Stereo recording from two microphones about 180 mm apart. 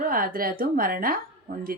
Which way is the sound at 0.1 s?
55° right (ahead or behind).